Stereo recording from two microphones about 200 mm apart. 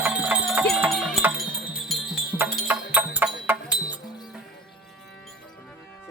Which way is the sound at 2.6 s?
10° right (ahead or behind).